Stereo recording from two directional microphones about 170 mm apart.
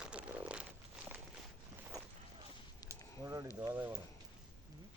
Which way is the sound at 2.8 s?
20° right (ahead or behind).